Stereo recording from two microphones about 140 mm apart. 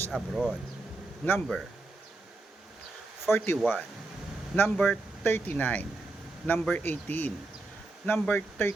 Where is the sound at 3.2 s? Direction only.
15° left (ahead or behind).